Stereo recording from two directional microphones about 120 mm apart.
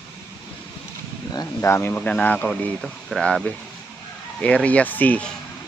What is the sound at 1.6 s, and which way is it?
Speech, 20° left (ahead or behind).